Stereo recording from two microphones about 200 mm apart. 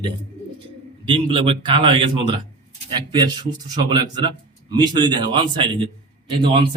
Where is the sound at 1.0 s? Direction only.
25° right (ahead or behind).